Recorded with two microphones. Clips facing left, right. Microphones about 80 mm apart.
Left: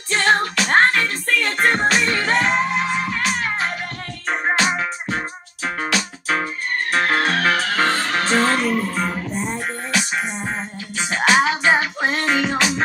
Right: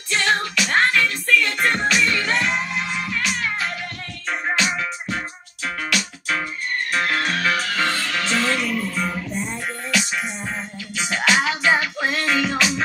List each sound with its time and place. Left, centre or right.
0.1 s music: left